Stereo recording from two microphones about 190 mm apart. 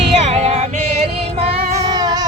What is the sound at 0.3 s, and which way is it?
Female singing, 35° right (ahead or behind).